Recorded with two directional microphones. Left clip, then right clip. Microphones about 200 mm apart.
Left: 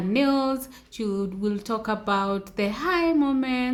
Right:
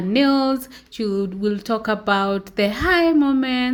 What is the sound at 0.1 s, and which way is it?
A woman's voice, 20° right (ahead or behind).